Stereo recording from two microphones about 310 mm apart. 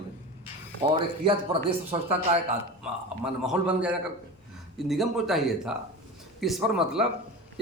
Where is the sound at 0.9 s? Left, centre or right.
Centre.